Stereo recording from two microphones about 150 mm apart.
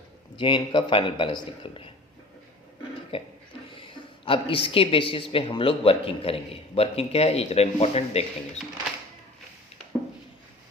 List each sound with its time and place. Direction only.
0.3 s a woman's voice: 30° left (ahead or behind)
3.1 s a woman's voice: 35° left (ahead or behind)